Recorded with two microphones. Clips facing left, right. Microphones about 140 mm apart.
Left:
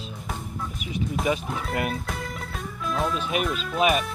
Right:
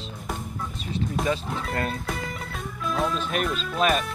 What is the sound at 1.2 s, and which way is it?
Speech, 15° left (ahead or behind).